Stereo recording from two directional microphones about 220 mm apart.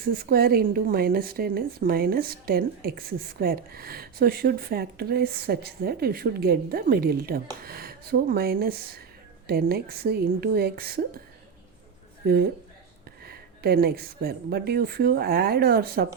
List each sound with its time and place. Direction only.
0.1 s a woman's voice: 45° right (ahead or behind)
12.2 s a woman's voice: 45° right (ahead or behind)